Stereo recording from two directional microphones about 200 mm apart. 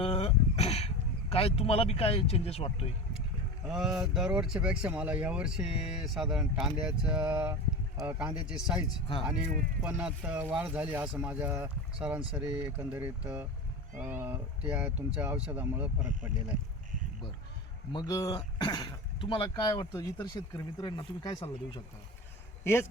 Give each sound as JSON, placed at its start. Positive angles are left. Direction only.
{"t": 0.0, "sound": "speech", "side_deg": 30}
{"t": 3.7, "sound": "speech", "side_deg": 0}
{"t": 8.9, "sound": "speech", "side_deg": 25}
{"t": 9.8, "sound": "speech", "side_deg": -5}
{"t": 17.9, "sound": "speech", "side_deg": 15}
{"t": 22.6, "sound": "speech", "side_deg": 10}